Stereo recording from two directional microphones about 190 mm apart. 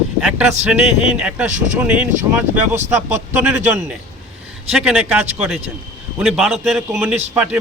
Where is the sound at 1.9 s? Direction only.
5° right (ahead or behind).